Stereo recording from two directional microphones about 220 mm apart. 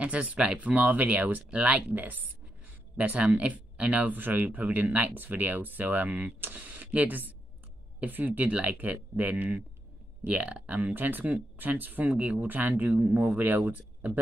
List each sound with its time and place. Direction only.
0.0 s speech: 5° right (ahead or behind)